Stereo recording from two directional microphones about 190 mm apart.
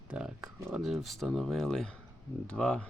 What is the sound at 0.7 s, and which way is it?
Speech, 5° right (ahead or behind).